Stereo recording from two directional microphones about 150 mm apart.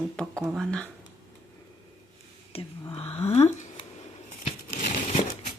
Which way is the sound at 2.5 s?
40° left (ahead or behind).